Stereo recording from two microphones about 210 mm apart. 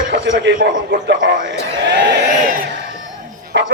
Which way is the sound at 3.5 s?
60° right (ahead or behind).